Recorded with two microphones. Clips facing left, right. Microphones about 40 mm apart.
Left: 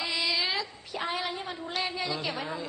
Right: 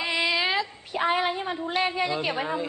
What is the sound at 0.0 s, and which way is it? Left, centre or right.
A woman's voice, right.